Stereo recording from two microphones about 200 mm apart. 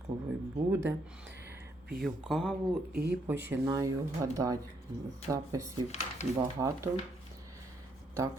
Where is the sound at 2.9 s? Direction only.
50° right (ahead or behind).